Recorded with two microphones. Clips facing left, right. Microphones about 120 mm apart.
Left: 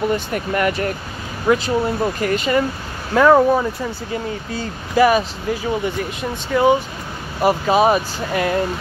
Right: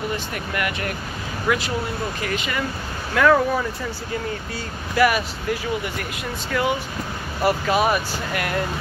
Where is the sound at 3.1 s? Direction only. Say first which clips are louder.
Left 5 dB; 25° left (ahead or behind).